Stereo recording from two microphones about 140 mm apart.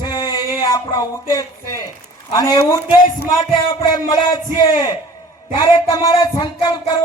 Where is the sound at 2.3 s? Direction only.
25° left (ahead or behind).